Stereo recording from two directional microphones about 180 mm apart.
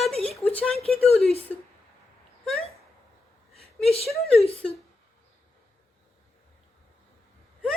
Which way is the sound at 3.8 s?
35° left (ahead or behind).